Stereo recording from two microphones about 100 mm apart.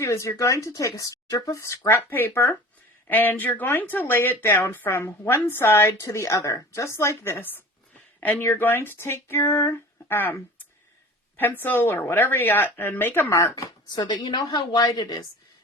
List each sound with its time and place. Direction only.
0.0 s speech: 30° left (ahead or behind)
13.3 s speech: 30° left (ahead or behind)
13.9 s a woman's voice: 45° left (ahead or behind)